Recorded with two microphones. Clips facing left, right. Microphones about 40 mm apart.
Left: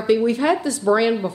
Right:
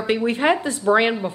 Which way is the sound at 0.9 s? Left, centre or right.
Right.